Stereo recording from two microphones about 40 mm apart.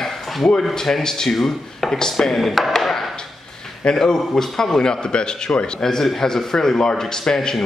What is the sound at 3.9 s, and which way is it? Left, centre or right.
A man's voice, centre.